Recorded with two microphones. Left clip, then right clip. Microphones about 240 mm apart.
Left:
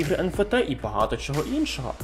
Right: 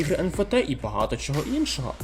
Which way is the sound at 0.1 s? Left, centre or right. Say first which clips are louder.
Even; right.